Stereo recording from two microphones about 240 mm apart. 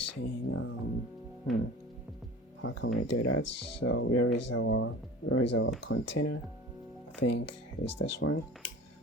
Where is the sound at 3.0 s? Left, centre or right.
Left.